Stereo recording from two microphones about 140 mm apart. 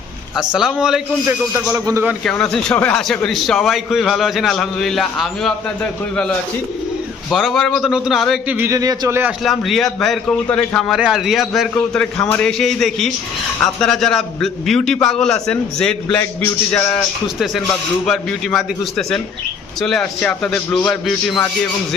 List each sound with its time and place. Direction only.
0.3 s a man's voice: 5° right (ahead or behind)
1.7 s speech: 20° right (ahead or behind)
2.2 s a man's voice: 5° left (ahead or behind)
8.4 s a man's voice: 15° right (ahead or behind)
8.7 s speech: 25° right (ahead or behind)
9.4 s a man's voice: centre (ahead or behind)
18.0 s a man's voice: centre (ahead or behind)